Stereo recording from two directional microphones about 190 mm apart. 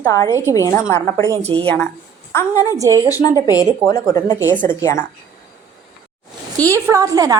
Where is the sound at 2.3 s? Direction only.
15° left (ahead or behind).